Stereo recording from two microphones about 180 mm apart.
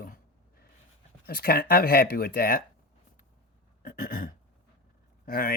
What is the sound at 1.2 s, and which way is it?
Speech, 55° left (ahead or behind).